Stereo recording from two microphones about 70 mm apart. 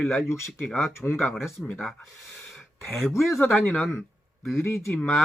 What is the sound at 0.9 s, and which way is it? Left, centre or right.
Speech, left.